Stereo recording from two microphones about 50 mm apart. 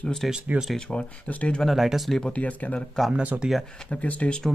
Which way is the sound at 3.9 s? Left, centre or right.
Left.